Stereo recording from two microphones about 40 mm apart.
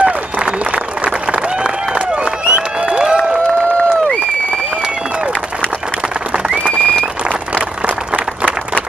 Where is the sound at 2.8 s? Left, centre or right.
Centre.